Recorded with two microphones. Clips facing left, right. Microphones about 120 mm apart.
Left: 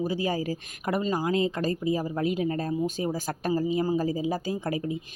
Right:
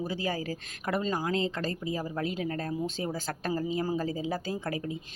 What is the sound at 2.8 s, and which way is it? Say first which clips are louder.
Speech: left 4 dB; 10° left (ahead or behind).